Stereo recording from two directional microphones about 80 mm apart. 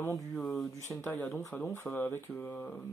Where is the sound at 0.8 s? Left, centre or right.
Left.